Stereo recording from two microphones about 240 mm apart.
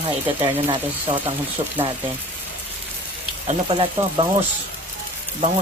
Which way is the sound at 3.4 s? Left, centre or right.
Right.